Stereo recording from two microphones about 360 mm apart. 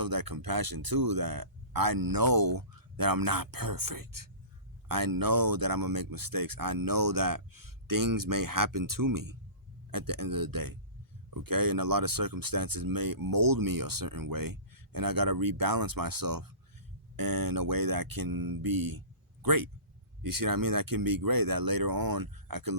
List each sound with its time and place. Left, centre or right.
0.0 s speech: right